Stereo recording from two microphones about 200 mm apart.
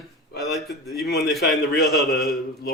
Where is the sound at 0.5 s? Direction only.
Centre (ahead or behind).